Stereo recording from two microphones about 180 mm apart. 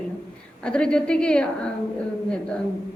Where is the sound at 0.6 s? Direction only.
5° left (ahead or behind).